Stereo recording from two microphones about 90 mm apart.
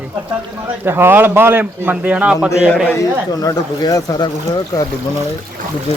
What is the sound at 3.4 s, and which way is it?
Speech, 40° left (ahead or behind).